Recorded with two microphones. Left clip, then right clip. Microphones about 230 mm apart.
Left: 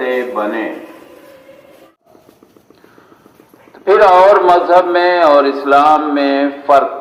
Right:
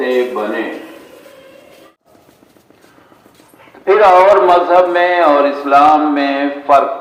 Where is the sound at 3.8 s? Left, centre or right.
Left.